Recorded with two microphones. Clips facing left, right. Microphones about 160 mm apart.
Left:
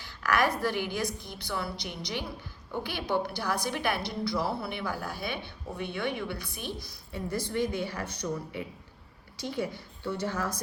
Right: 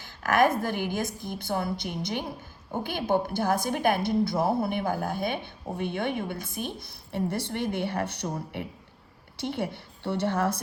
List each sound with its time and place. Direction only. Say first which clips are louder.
0.0 s a woman's voice: right 4 dB; 50° right (ahead or behind)
6.8 s a woman's voice: right 7 dB; 65° right (ahead or behind)